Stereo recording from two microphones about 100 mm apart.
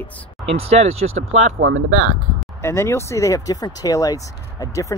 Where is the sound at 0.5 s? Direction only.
90° right.